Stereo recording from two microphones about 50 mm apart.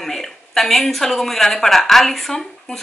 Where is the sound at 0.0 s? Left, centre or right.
Centre.